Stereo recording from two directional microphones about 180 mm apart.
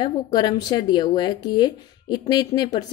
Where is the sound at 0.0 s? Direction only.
20° left (ahead or behind).